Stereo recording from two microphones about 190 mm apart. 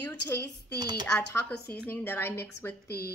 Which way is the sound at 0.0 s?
10° left (ahead or behind).